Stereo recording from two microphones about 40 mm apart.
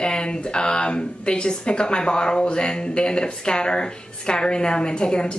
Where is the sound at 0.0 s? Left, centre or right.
Left.